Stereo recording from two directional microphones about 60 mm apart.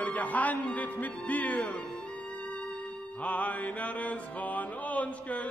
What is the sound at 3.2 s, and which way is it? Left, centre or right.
Mantra, left.